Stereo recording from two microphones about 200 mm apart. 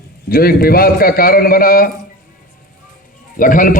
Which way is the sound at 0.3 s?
50° left (ahead or behind).